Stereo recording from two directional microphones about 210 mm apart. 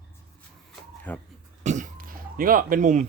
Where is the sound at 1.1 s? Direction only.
10° left (ahead or behind).